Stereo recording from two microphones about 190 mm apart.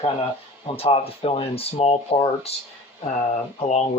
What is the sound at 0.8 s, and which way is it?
Speech, 30° left (ahead or behind).